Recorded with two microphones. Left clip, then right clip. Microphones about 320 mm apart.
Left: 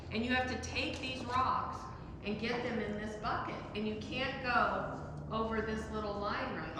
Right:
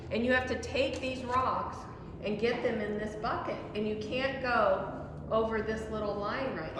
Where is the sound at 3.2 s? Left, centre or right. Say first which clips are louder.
Right 2 dB; centre.